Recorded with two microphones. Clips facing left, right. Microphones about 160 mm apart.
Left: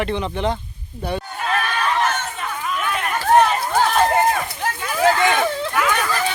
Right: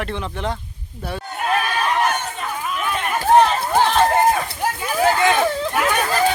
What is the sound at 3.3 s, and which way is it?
Run, centre (ahead or behind).